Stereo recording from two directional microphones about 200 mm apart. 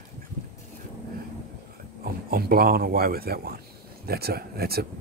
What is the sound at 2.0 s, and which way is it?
Speech, 50° right (ahead or behind).